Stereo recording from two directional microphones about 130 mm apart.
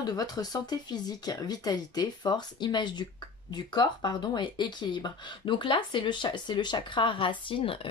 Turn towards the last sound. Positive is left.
turn(degrees=45)  # may be behind; listen again after turning